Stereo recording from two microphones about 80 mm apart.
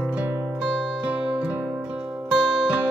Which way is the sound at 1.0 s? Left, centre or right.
Centre.